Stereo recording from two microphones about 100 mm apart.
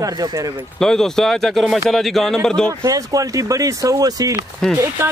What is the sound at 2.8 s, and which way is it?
A man's voice, 35° right (ahead or behind).